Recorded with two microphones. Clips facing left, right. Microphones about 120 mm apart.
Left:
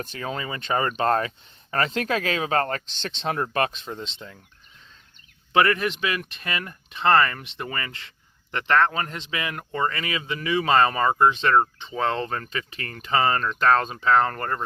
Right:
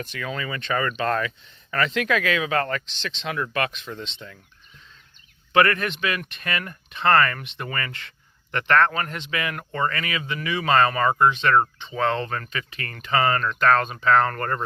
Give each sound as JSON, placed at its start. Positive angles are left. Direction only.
{"t": 0.0, "sound": "speech", "side_deg": 35}
{"t": 5.5, "sound": "speech", "side_deg": 20}